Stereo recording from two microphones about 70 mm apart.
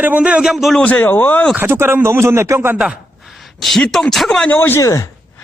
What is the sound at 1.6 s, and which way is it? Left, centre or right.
Speech, right.